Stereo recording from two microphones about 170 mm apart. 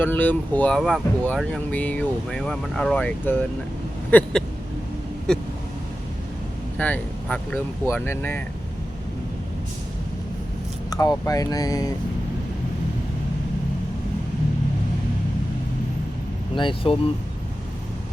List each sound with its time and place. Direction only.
0.0 s speech: 10° left (ahead or behind)
4.1 s vehicle: 5° left (ahead or behind)
6.7 s speech: 10° left (ahead or behind)
10.8 s speech: 20° left (ahead or behind)
16.6 s speech: 30° left (ahead or behind)